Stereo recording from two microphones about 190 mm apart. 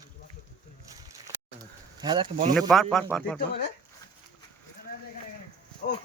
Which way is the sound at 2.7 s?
5° left (ahead or behind).